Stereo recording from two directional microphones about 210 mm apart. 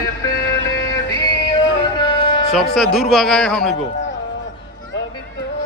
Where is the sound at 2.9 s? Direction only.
Centre (ahead or behind).